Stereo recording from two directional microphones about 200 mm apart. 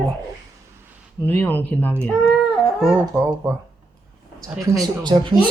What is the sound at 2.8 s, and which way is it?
Speech, 5° right (ahead or behind).